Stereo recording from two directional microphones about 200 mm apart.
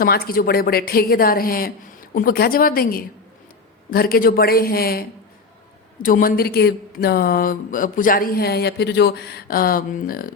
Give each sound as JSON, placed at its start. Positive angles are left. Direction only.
{"t": 0.0, "sound": "speech", "side_deg": 45}